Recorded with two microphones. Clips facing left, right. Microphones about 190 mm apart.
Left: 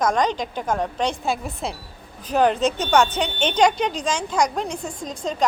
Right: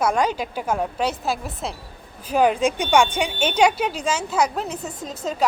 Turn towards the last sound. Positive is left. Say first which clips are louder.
# even
turn(degrees=-5)  # may be behind; listen again after turning